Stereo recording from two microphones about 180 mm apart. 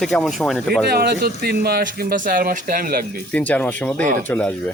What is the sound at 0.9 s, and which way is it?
Speech, 60° right (ahead or behind).